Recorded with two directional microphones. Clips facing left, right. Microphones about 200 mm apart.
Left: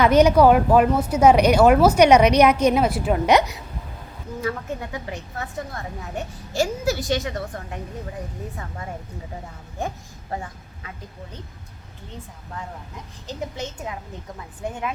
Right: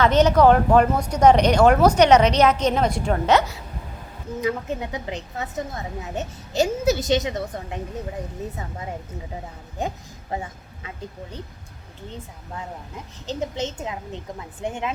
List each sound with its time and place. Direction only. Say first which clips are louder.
0.0 s speech: left 1 dB; 10° left (ahead or behind)
4.4 s a woman's voice: right 2 dB; 20° right (ahead or behind)
13.2 s a woman's voice: right 4 dB; 20° right (ahead or behind)